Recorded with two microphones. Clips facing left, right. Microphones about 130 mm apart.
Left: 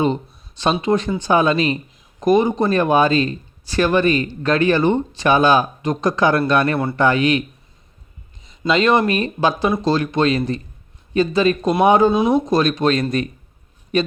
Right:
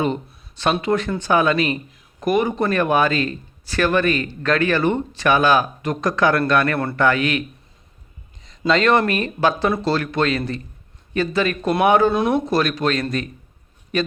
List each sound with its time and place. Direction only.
0.6 s speech: 20° left (ahead or behind)
8.4 s a man's voice: 15° left (ahead or behind)